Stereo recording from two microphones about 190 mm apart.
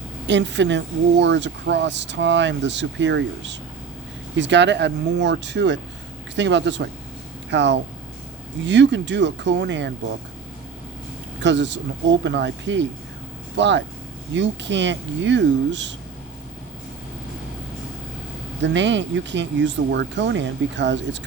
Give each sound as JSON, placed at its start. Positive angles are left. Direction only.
{"t": 0.3, "sound": "speech", "side_deg": -70}
{"t": 11.4, "sound": "speech", "side_deg": -65}
{"t": 18.6, "sound": "speech", "side_deg": -70}